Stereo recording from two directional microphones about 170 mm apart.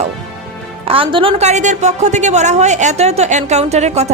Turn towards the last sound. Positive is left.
turn(degrees=-40)  # may be behind; listen again after turning